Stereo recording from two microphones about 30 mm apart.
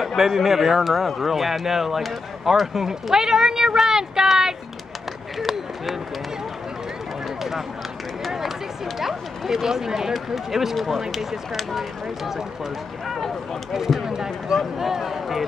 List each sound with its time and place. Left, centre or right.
0.0 s speech: centre
5.4 s a sound: centre
9.0 s speech: centre
13.9 s speech: right
14.8 s speech: centre